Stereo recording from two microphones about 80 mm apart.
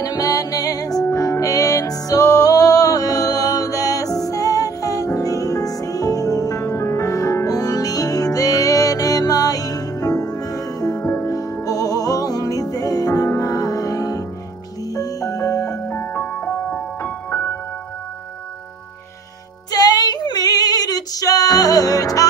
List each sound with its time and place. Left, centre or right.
0.0 s music: left
11.0 s music: left
11.6 s music: left
15.8 s music: left
19.7 s female singing: left